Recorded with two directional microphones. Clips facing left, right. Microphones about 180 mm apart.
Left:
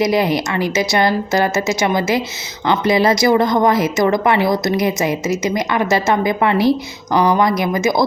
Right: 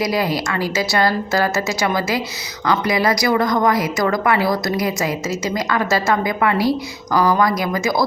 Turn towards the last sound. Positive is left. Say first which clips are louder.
# left 3 dB
turn(degrees=20)  # may be behind; listen again after turning